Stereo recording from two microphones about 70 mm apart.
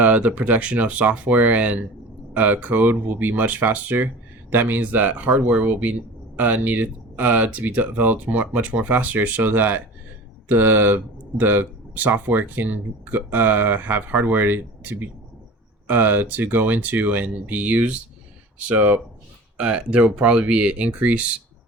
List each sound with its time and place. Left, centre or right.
0.0 s speech: right